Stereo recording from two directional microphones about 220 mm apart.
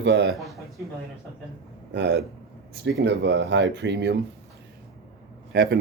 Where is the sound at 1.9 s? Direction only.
50° right (ahead or behind).